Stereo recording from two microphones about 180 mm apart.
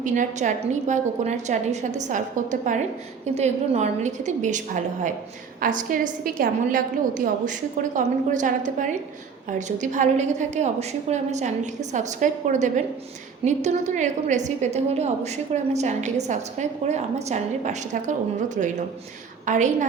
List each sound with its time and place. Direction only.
0.0 s a woman's voice: 45° right (ahead or behind)